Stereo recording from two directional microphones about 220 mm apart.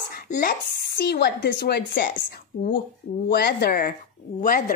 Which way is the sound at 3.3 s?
45° left (ahead or behind).